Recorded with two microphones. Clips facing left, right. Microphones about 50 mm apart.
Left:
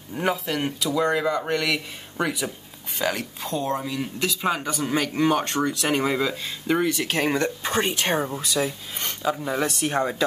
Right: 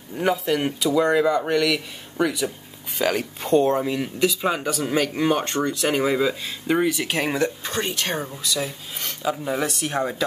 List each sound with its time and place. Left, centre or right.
0.1 s speech: centre
3.0 s speech: centre
3.6 s speech: right
4.0 s speech: centre
7.6 s speech: left
8.5 s speech: centre